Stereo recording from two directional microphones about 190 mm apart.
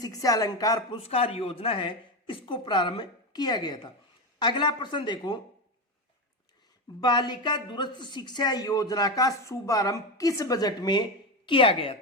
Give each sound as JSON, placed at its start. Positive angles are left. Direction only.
{"t": 0.0, "sound": "speech", "side_deg": 20}
{"t": 1.0, "sound": "speech", "side_deg": 30}
{"t": 7.0, "sound": "speech", "side_deg": 25}